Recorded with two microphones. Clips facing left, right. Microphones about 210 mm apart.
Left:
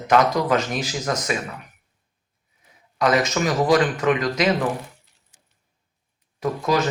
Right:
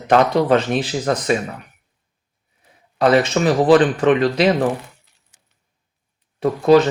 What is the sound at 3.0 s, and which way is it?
Speech, 30° right (ahead or behind).